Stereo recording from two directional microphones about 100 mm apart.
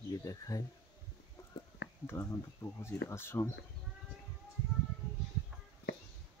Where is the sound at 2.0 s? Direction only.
25° left (ahead or behind).